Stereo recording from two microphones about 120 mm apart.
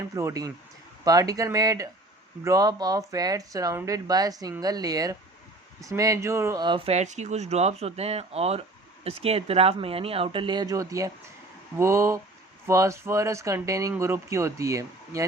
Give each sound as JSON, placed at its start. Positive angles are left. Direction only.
{"t": 0.1, "sound": "a woman's voice", "side_deg": -25}
{"t": 6.6, "sound": "a woman's voice", "side_deg": -40}
{"t": 6.8, "sound": "speech", "side_deg": -70}